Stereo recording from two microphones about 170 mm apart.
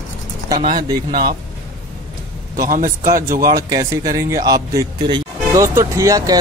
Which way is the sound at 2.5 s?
55° right (ahead or behind).